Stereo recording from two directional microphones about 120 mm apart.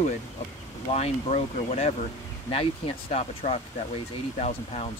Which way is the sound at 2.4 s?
55° left (ahead or behind).